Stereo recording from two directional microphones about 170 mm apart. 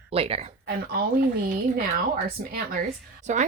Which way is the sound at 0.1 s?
35° right (ahead or behind).